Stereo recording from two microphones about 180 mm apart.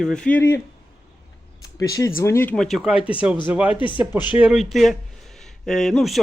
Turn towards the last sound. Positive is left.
turn(degrees=0)  # may be behind; listen again after turning